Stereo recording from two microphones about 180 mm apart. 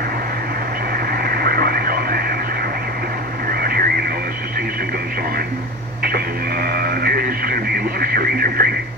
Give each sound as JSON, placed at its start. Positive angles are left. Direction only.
{"t": 1.1, "sound": "radio", "side_deg": -60}
{"t": 3.4, "sound": "radio", "side_deg": -55}
{"t": 6.0, "sound": "radio", "side_deg": -60}